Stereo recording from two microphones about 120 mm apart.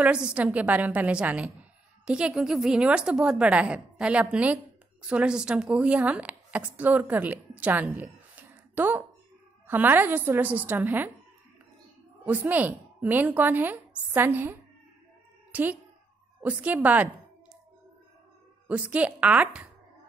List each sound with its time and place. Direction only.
0.0 s a woman's voice: 10° right (ahead or behind)
7.8 s a sound: 15° right (ahead or behind)
9.7 s a woman's voice: 15° right (ahead or behind)
12.3 s a woman's voice: 15° right (ahead or behind)
18.7 s a woman's voice: 10° right (ahead or behind)